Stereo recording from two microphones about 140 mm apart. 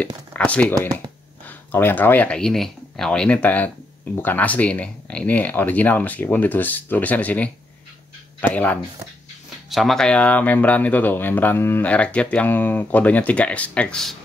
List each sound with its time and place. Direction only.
0.3 s speech: 10° left (ahead or behind)
9.7 s speech: centre (ahead or behind)